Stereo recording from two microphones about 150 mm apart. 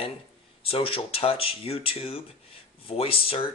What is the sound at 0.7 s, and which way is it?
Speech, 40° left (ahead or behind).